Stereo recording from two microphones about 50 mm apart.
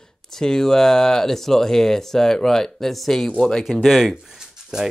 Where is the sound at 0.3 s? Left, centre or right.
Centre.